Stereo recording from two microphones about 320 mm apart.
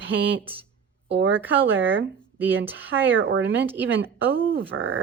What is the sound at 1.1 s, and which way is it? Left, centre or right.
Speech, right.